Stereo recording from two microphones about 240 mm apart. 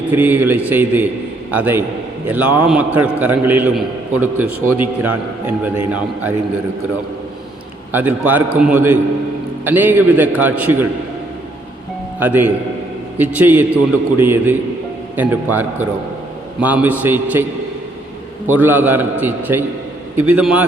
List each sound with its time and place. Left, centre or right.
0.1 s a man's voice: centre
7.9 s a man's voice: centre
12.2 s a man's voice: centre
18.4 s a man's voice: centre